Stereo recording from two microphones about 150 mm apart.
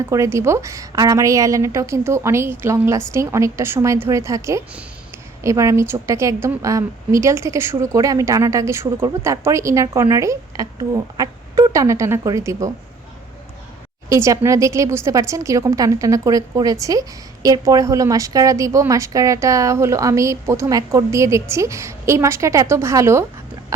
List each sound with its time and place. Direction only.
0.0 s a woman's voice: 20° right (ahead or behind)
14.1 s a woman's voice: 20° right (ahead or behind)